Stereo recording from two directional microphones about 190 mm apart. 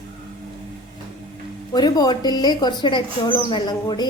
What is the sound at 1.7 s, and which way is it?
Speech, 20° left (ahead or behind).